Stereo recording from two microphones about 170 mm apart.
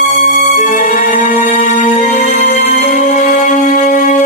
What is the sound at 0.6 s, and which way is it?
Music, 45° left (ahead or behind).